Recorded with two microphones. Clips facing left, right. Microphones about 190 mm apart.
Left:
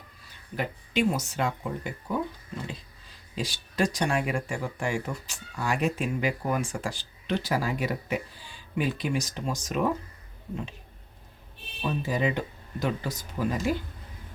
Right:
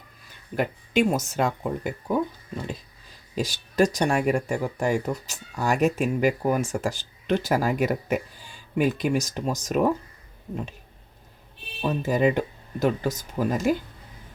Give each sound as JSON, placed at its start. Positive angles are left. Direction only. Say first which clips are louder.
{"t": 0.5, "sound": "speech", "louder": "right 5 dB", "side_deg": -50}
{"t": 3.3, "sound": "speech", "louder": "right 6 dB", "side_deg": -40}
{"t": 11.8, "sound": "speech", "louder": "right 5 dB", "side_deg": -45}